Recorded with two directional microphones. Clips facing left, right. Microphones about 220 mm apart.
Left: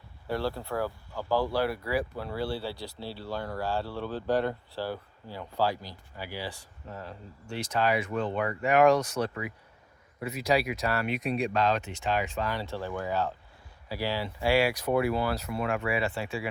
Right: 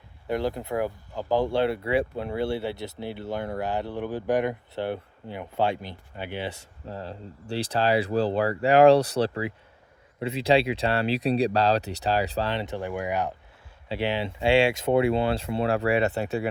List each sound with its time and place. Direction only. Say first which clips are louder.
0.3 s speech: right 4 dB; 20° right (ahead or behind); by 16.5 s 40° right (ahead or behind)